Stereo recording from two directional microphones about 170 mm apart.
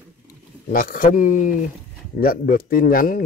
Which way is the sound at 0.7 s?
55° left (ahead or behind).